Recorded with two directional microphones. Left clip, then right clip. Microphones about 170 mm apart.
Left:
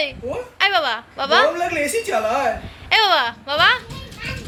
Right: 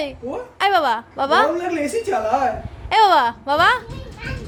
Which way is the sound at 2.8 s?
25° right (ahead or behind).